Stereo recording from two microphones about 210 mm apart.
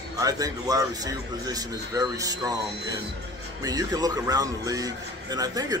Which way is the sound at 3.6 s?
15° right (ahead or behind).